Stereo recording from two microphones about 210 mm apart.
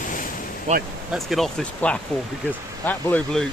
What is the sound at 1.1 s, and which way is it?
Speech, centre (ahead or behind).